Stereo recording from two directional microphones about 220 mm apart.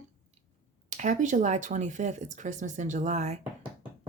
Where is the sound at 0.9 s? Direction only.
35° right (ahead or behind).